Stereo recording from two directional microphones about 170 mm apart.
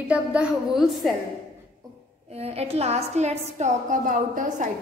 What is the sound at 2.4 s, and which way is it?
A woman's voice, 35° right (ahead or behind).